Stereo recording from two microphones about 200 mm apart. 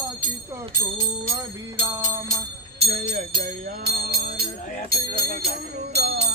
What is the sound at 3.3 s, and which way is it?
Music, 45° right (ahead or behind).